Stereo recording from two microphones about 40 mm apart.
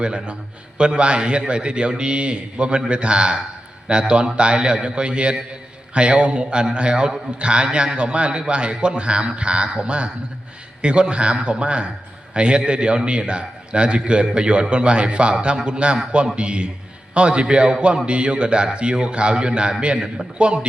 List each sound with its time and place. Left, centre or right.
0.0 s a man's voice: right